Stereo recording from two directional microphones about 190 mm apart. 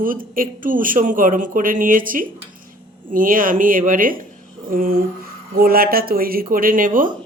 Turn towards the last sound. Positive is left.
turn(degrees=-45)  # may be behind; listen again after turning